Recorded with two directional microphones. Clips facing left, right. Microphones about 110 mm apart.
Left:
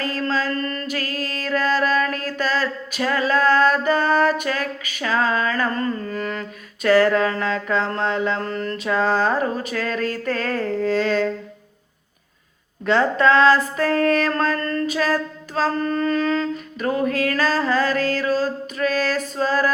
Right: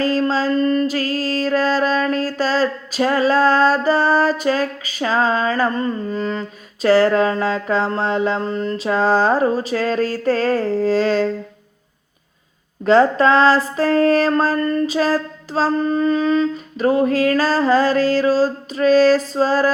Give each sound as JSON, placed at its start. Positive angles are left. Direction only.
{"t": 0.0, "sound": "a sound", "side_deg": -30}
{"t": 0.4, "sound": "music", "side_deg": -20}
{"t": 0.9, "sound": "music", "side_deg": -35}
{"t": 8.4, "sound": "music", "side_deg": -20}
{"t": 12.8, "sound": "music", "side_deg": -35}
{"t": 14.6, "sound": "a sound", "side_deg": -15}
{"t": 14.8, "sound": "a sound", "side_deg": -30}
{"t": 15.8, "sound": "mantra", "side_deg": -20}
{"t": 16.7, "sound": "music", "side_deg": -30}